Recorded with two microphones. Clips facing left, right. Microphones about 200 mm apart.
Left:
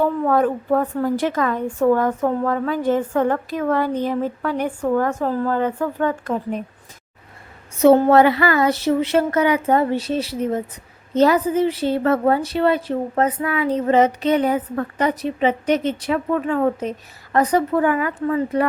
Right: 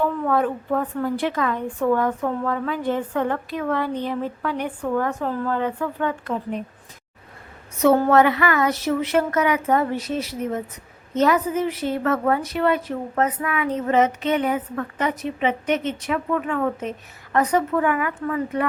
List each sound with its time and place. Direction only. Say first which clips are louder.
0.0 s a woman's voice: left 3 dB; 40° left (ahead or behind)
7.8 s a woman's voice: left 4 dB; 25° left (ahead or behind)